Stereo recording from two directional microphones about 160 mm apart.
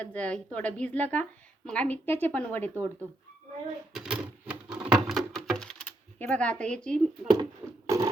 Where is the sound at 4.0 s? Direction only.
5° right (ahead or behind).